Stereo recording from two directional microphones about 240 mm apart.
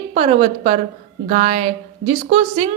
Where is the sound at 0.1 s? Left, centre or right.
Right.